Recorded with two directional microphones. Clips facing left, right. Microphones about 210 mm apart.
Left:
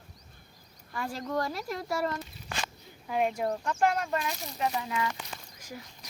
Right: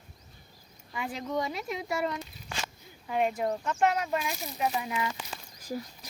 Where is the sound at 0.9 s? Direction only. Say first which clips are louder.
Even; 5° right (ahead or behind).